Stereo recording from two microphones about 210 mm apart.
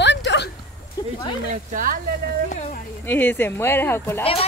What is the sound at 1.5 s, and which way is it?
Speech, 40° right (ahead or behind).